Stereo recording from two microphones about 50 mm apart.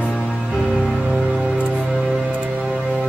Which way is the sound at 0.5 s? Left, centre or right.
Centre.